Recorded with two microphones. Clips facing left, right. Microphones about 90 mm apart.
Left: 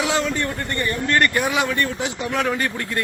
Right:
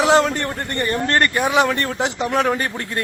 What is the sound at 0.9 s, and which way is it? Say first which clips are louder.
Speech: right 1 dB; 40° right (ahead or behind).